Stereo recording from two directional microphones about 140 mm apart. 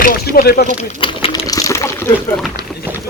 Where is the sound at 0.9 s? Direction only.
40° left (ahead or behind).